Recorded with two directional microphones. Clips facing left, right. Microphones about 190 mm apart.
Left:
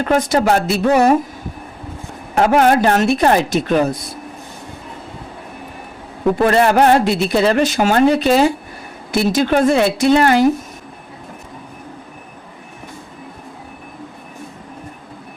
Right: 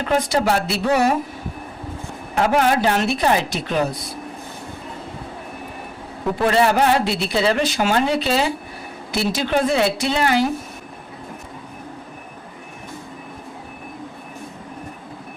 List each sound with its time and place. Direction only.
0.0 s a woman's voice: 50° left (ahead or behind)
2.3 s a woman's voice: 50° left (ahead or behind)
6.4 s a woman's voice: 55° left (ahead or behind)